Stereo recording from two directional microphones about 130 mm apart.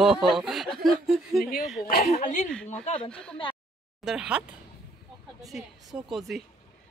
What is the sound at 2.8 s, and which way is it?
Speech, 50° left (ahead or behind).